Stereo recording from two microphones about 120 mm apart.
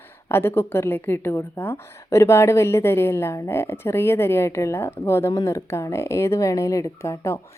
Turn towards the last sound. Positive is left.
turn(degrees=20)  # may be behind; listen again after turning